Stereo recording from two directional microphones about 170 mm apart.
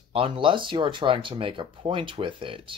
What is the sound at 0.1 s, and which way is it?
Speech, 30° right (ahead or behind).